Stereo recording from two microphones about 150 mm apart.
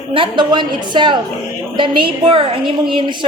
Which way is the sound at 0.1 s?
35° right (ahead or behind).